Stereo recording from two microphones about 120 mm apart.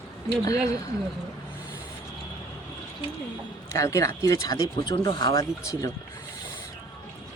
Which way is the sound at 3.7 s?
25° left (ahead or behind).